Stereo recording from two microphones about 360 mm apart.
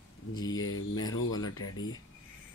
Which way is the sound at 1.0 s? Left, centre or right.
Left.